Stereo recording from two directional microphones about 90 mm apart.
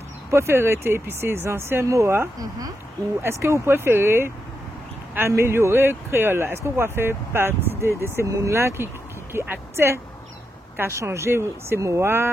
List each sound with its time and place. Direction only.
0.3 s speech: 30° right (ahead or behind)
2.3 s speech: 45° right (ahead or behind)
3.2 s speech: 30° right (ahead or behind)